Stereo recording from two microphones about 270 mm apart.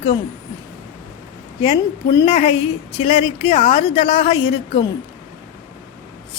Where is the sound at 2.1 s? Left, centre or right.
Centre.